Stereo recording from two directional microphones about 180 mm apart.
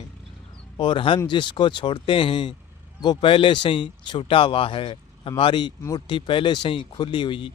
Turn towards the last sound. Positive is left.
turn(degrees=25)  # may be behind; listen again after turning